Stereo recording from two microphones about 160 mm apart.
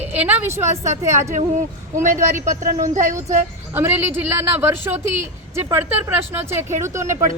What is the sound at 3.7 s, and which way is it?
Speech, 15° right (ahead or behind).